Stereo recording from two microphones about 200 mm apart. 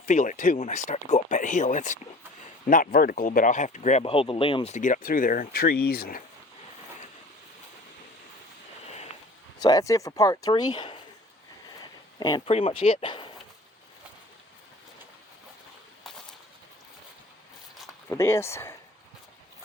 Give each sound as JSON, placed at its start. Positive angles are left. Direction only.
{"t": 0.0, "sound": "speech", "side_deg": 40}
{"t": 9.6, "sound": "speech", "side_deg": 20}
{"t": 11.8, "sound": "a sound", "side_deg": 20}
{"t": 12.5, "sound": "speech", "side_deg": 30}
{"t": 18.1, "sound": "speech", "side_deg": 15}